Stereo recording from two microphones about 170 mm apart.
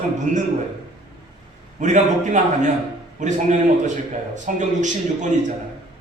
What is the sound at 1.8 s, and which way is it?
A man's voice, 45° right (ahead or behind).